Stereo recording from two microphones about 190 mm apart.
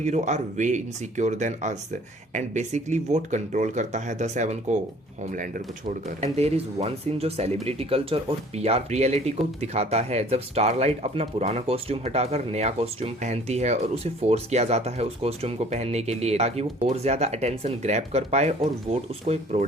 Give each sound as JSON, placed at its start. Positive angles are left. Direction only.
{"t": 0.0, "sound": "speech", "side_deg": -40}
{"t": 6.1, "sound": "speech", "side_deg": -35}